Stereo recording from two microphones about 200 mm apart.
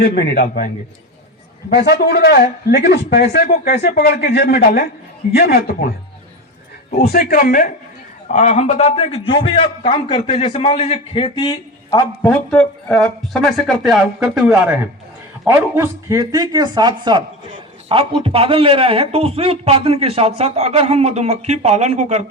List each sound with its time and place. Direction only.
0.0 s speech: 55° left (ahead or behind)
1.7 s speech: 55° left (ahead or behind)
7.0 s a man's voice: 50° left (ahead or behind); by 22.3 s 35° right (ahead or behind)